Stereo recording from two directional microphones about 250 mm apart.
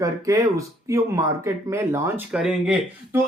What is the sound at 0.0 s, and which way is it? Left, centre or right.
Speech, centre.